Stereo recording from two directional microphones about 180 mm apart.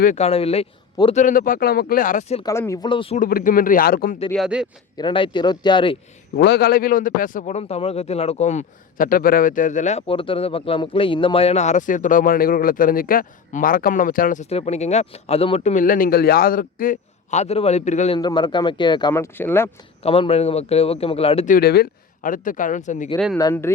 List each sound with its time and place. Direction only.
0.0 s speech: 40° left (ahead or behind)
1.2 s a man's voice: 50° left (ahead or behind)
2.4 s speech: 15° left (ahead or behind)
3.2 s a man's voice: 50° left (ahead or behind)
4.3 s speech: centre (ahead or behind)
4.9 s speech: 25° left (ahead or behind)
6.3 s a man's voice: 60° left (ahead or behind)
14.5 s speech: 35° left (ahead or behind)
18.2 s speech: 25° left (ahead or behind)
19.1 s speech: 10° left (ahead or behind)
20.0 s speech: 30° left (ahead or behind)
21.5 s a man's voice: 60° left (ahead or behind); by 23.0 s 45° left (ahead or behind)
23.1 s speech: 5° left (ahead or behind)
23.4 s speech: 15° left (ahead or behind)